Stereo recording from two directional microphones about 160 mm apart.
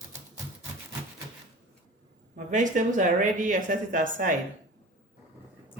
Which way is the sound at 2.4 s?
55° right (ahead or behind).